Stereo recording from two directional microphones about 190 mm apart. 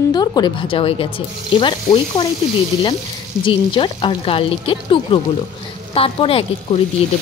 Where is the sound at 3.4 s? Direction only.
25° left (ahead or behind).